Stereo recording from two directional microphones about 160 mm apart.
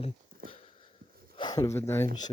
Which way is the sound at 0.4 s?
65° right (ahead or behind).